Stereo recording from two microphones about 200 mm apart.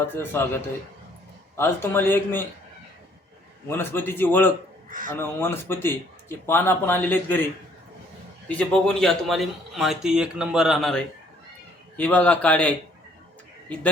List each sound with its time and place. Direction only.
0.0 s speech: 10° left (ahead or behind)
3.7 s speech: 10° left (ahead or behind)
4.9 s speech: 40° right (ahead or behind)
5.1 s speech: 10° left (ahead or behind)
8.4 s speech: 5° left (ahead or behind)